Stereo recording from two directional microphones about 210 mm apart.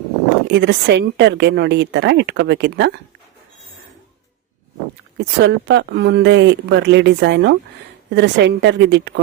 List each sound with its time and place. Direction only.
0.4 s a woman's voice: 55° right (ahead or behind)
5.1 s a woman's voice: 55° right (ahead or behind)